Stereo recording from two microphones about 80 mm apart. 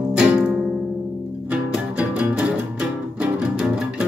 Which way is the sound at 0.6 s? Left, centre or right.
Centre.